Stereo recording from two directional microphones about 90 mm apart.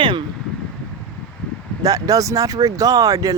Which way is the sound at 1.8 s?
40° right (ahead or behind).